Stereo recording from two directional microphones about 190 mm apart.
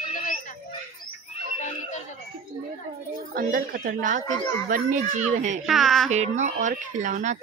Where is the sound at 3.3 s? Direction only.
50° right (ahead or behind).